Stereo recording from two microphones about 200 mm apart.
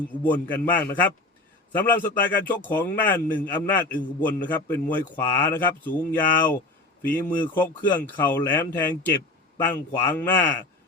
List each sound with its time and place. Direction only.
0.2 s a man's voice: 10° left (ahead or behind)